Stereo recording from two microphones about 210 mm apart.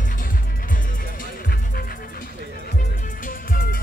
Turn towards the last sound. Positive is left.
turn(degrees=40)  # may be behind; listen again after turning